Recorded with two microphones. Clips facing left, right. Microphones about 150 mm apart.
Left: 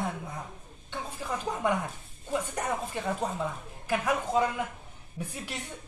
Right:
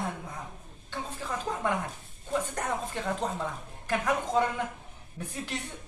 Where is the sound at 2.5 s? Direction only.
10° left (ahead or behind).